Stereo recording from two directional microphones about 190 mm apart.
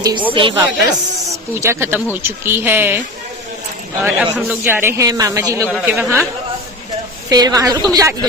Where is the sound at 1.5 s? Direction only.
15° right (ahead or behind).